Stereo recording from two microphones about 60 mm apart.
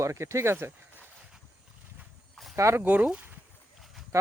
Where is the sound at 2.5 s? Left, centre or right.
Right.